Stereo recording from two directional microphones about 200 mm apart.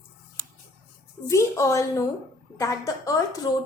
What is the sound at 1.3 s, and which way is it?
A woman's voice, 15° left (ahead or behind).